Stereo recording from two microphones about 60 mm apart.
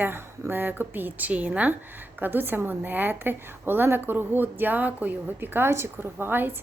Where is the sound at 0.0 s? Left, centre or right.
Right.